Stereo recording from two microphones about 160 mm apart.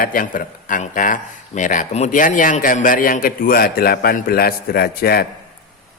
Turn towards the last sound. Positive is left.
turn(degrees=75)  # may be behind; listen again after turning